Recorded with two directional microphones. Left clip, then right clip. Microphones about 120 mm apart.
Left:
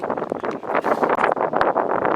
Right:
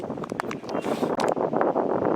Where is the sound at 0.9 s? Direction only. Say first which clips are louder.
Left 6 dB; 40° left (ahead or behind).